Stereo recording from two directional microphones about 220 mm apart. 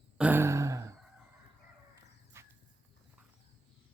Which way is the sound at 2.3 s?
10° right (ahead or behind).